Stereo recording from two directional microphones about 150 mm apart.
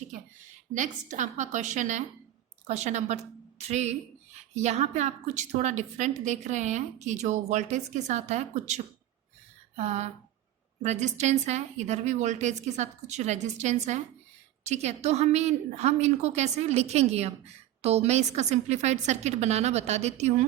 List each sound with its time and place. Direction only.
0.7 s a woman's voice: 55° right (ahead or behind)